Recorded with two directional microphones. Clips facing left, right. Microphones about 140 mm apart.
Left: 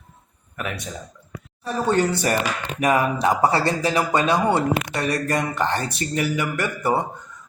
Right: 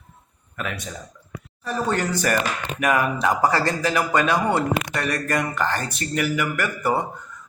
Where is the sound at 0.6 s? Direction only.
20° left (ahead or behind).